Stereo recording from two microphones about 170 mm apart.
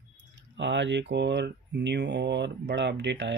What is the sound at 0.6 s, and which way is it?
Speech, 90° right.